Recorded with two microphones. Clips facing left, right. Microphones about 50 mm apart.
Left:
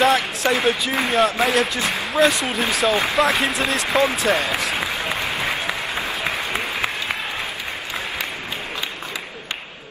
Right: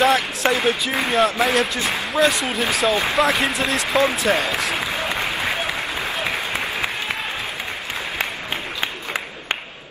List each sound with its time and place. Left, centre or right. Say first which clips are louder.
0.0 s speech: even; centre